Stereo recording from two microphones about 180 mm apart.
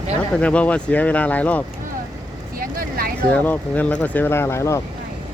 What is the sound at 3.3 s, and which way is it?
Speech, 10° left (ahead or behind).